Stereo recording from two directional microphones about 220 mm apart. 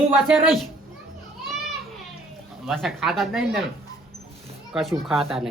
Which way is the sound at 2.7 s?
Centre (ahead or behind).